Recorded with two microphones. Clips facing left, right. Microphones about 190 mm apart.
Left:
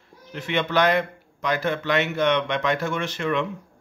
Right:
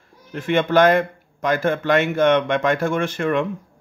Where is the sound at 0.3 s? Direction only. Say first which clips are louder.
Right 6 dB; 50° right (ahead or behind).